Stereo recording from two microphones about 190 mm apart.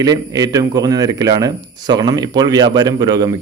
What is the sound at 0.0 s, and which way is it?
Speech, 20° right (ahead or behind).